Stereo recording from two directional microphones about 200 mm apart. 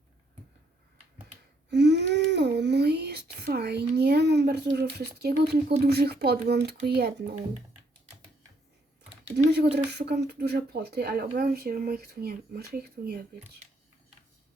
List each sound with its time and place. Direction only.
1.7 s a sound: 60° right (ahead or behind)
3.4 s speech: 55° right (ahead or behind)
9.5 s speech: 55° right (ahead or behind)